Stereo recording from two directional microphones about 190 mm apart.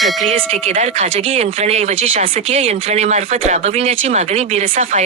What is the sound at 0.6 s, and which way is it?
Speech, 40° right (ahead or behind).